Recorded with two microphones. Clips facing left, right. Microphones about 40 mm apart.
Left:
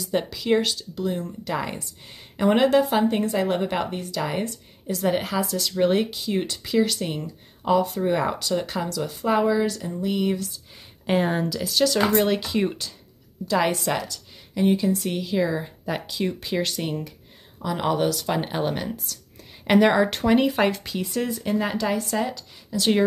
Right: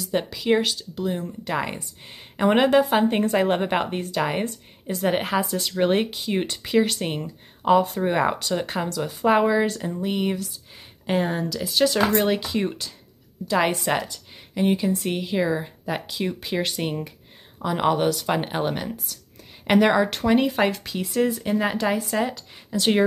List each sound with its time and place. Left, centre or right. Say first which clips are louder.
0.2 s speech: right 1 dB; centre
2.9 s speech: right 2 dB; right
9.7 s speech: right 1 dB; right
9.9 s speech: left 2 dB; right
11.1 s speech: left 1 dB; centre
12.1 s speech: even; centre
13.5 s a woman's voice: right 1 dB; centre
16.6 s speech: right 1 dB; centre